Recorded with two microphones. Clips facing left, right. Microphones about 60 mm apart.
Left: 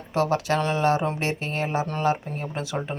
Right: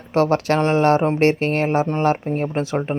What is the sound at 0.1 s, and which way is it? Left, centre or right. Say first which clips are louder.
Speech: right 5 dB; right.